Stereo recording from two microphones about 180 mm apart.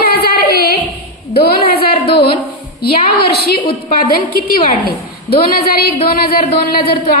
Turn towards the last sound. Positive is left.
turn(degrees=55)  # may be behind; listen again after turning